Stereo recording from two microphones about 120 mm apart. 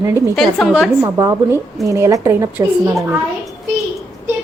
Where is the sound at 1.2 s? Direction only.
25° right (ahead or behind).